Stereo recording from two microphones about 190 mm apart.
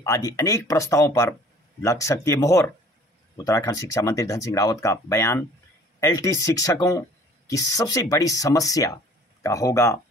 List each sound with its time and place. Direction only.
0.0 s speech: 15° left (ahead or behind)